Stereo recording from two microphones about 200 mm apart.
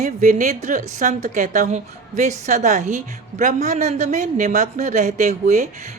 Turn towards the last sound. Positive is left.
turn(degrees=-40)  # may be behind; listen again after turning